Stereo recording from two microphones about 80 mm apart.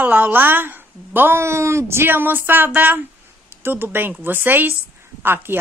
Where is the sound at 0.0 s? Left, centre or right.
Right.